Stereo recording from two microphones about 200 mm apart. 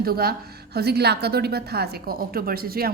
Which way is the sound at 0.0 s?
50° right (ahead or behind).